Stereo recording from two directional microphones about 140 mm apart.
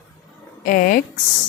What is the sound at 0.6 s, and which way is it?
Speech, 75° left (ahead or behind).